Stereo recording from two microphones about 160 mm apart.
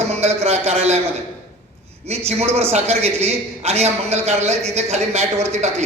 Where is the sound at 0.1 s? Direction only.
40° right (ahead or behind).